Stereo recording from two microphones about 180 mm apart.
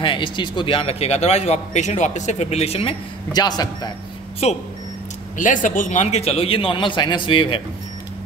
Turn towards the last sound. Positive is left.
turn(degrees=30)  # may be behind; listen again after turning